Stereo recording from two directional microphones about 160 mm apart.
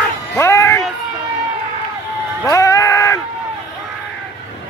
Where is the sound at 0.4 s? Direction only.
15° left (ahead or behind).